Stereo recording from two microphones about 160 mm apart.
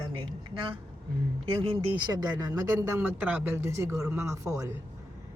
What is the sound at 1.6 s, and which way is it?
Speech, 30° right (ahead or behind).